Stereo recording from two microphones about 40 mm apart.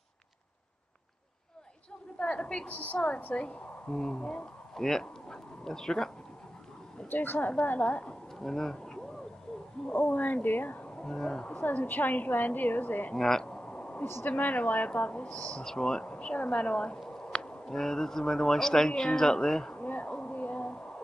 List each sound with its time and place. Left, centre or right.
2.1 s a woman's voice: left
3.9 s speech: centre
5.0 s a sound: centre
7.1 s speech: left
7.6 s a woman's voice: left
8.4 s speech: centre
10.1 s a woman's voice: left
11.1 s speech: centre
11.5 s a woman's voice: left
13.1 s speech: centre
13.6 s a sound: left
14.2 s a woman's voice: left
15.6 s speech: centre
19.8 s a sound: left